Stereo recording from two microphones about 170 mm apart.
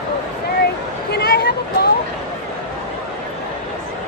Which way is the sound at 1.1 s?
70° left (ahead or behind).